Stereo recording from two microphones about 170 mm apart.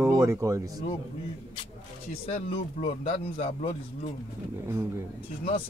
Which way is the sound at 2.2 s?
35° left (ahead or behind).